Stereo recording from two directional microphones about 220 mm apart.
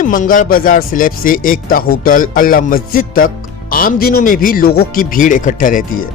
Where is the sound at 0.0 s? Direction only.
40° left (ahead or behind).